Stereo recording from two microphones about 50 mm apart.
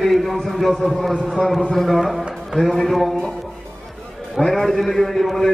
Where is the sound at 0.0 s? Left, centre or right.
Centre.